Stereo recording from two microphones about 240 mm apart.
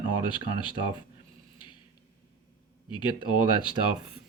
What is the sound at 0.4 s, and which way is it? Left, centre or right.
Speech, centre.